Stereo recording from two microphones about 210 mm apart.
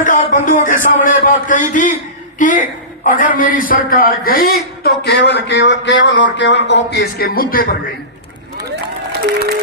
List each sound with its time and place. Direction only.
0.0 s a man's voice: 40° left (ahead or behind)